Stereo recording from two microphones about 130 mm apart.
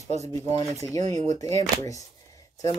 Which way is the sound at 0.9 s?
30° left (ahead or behind).